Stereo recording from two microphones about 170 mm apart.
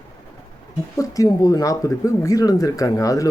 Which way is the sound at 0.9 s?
20° left (ahead or behind).